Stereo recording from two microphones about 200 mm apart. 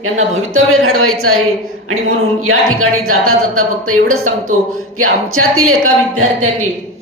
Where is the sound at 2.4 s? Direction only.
90° right.